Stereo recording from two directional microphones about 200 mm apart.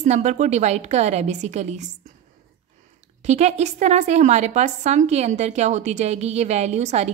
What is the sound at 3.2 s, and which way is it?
A woman's voice, 35° right (ahead or behind).